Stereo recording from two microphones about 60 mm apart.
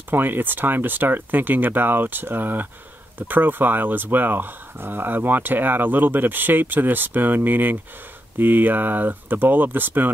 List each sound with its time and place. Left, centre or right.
0.1 s speech: right